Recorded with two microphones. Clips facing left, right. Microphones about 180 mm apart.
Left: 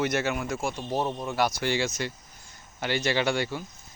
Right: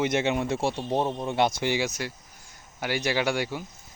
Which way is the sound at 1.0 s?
15° right (ahead or behind).